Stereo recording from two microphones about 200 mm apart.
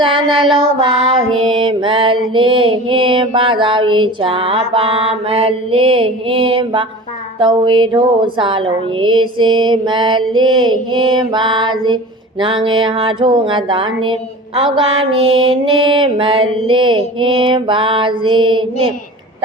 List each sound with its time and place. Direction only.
0.5 s music: 25° right (ahead or behind)